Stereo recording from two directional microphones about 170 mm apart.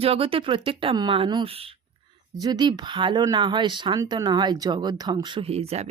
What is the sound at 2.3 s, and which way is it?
Speech, 25° right (ahead or behind).